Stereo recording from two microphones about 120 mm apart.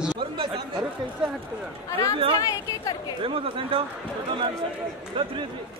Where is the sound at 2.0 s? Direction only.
50° right (ahead or behind).